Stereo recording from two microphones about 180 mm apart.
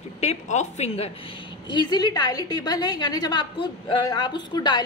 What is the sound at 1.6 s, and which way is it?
A woman's voice, 25° left (ahead or behind).